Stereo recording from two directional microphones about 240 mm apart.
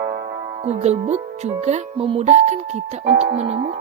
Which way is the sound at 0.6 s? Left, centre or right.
Right.